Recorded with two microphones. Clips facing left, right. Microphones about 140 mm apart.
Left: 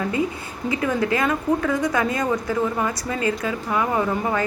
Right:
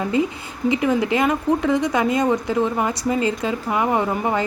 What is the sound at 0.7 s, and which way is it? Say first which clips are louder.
Speech: right 3 dB; 20° right (ahead or behind).